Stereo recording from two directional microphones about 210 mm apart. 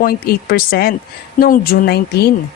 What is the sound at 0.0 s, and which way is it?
Speech, 45° left (ahead or behind).